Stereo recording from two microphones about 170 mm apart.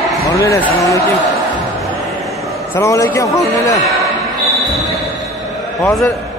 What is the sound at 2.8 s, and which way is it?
A man's voice, 15° left (ahead or behind).